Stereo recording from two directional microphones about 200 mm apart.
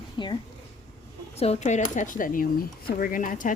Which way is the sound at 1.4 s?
35° left (ahead or behind).